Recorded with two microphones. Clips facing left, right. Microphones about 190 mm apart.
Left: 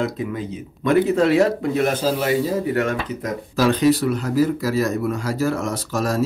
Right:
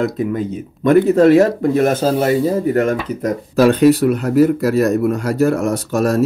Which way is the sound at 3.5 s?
60° right (ahead or behind).